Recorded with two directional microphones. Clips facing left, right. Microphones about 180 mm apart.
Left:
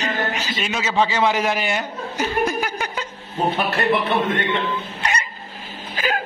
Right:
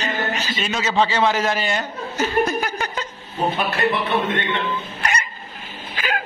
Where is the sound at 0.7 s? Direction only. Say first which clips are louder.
Right 1 dB; 10° left (ahead or behind).